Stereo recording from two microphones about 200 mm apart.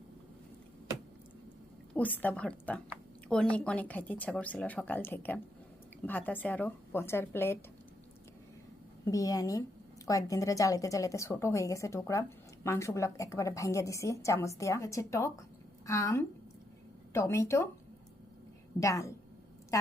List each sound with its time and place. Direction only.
1.9 s a woman's voice: 10° left (ahead or behind)
9.0 s a woman's voice: 15° left (ahead or behind)
18.8 s a woman's voice: 15° left (ahead or behind)